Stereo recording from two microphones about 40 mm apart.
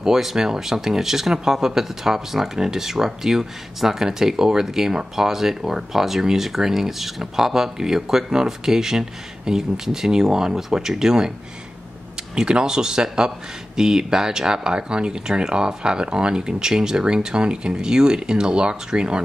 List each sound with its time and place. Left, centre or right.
0.0 s speech: centre
12.4 s speech: centre